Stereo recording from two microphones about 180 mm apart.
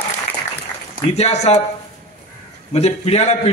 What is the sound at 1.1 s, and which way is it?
Speech, 35° left (ahead or behind).